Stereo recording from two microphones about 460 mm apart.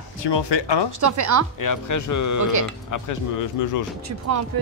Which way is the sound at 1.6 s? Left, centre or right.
Left.